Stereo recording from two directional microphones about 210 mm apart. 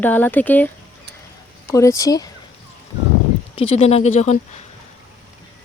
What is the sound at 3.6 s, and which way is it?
Speech, 25° left (ahead or behind).